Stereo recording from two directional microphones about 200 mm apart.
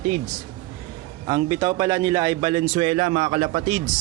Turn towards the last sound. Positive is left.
turn(degrees=-30)  # may be behind; listen again after turning